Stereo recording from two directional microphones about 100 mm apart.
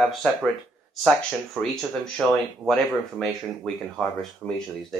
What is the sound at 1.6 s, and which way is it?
Speech, centre (ahead or behind).